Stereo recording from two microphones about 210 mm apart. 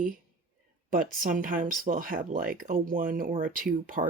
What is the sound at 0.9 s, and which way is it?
Speech, 40° right (ahead or behind).